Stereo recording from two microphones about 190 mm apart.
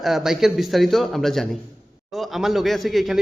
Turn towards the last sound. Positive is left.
turn(degrees=0)  # may be behind; listen again after turning